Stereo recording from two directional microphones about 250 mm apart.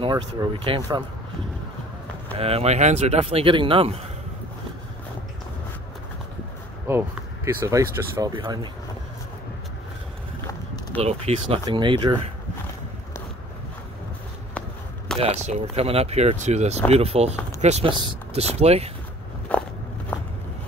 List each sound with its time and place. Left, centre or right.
0.0 s speech: right
2.3 s speech: right
6.9 s speech: centre
11.0 s speech: right
15.1 s speech: right
19.5 s walk: centre